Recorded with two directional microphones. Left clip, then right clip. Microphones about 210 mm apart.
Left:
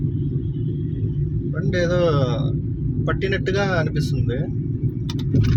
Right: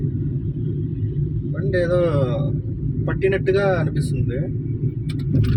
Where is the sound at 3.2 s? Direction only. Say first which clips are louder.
Right 5 dB; 20° left (ahead or behind).